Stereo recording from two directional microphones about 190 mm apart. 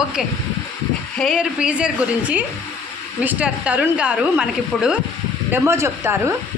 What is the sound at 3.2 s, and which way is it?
Speech, 5° right (ahead or behind).